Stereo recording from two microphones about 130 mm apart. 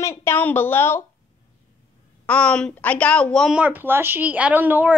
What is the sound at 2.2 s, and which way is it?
Speech, 10° left (ahead or behind).